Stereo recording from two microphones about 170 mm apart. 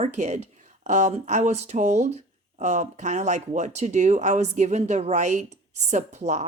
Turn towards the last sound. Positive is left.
turn(degrees=-40)  # may be behind; listen again after turning